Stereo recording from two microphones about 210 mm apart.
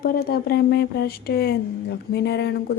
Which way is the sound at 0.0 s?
45° left (ahead or behind).